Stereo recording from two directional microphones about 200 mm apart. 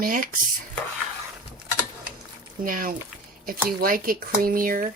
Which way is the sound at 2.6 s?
45° right (ahead or behind).